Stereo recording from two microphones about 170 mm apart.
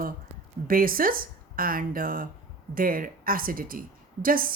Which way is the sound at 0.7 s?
55° right (ahead or behind).